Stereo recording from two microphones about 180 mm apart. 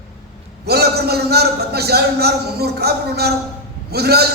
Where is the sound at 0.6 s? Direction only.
60° right (ahead or behind).